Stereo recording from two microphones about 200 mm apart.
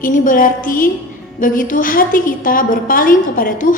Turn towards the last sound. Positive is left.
turn(degrees=40)  # may be behind; listen again after turning